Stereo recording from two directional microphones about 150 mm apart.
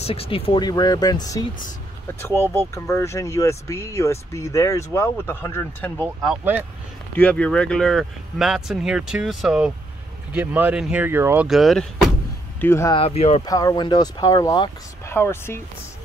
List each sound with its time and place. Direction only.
0.0 s speech: 40° left (ahead or behind); by 6.0 s 15° left (ahead or behind)
7.2 s speech: 10° left (ahead or behind); by 11.4 s 15° right (ahead or behind)
11.4 s speech: centre (ahead or behind)
12.5 s speech: 15° left (ahead or behind)
12.9 s speech: 40° left (ahead or behind)
13.5 s speech: 25° left (ahead or behind)